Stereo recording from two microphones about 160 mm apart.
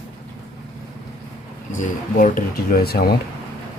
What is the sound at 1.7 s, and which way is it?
Speech, 55° left (ahead or behind).